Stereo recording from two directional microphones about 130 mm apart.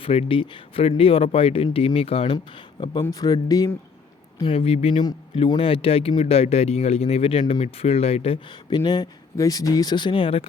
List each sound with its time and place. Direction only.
0.0 s speech: 45° left (ahead or behind)
3.0 s speech: 25° left (ahead or behind)
4.4 s speech: 45° left (ahead or behind)
8.7 s speech: 35° left (ahead or behind)